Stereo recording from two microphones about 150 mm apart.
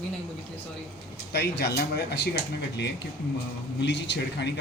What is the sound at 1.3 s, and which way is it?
A man's voice, 90° left.